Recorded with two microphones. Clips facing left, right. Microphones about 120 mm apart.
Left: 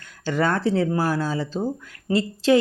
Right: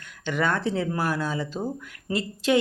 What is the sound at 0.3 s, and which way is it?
Speech, 35° left (ahead or behind).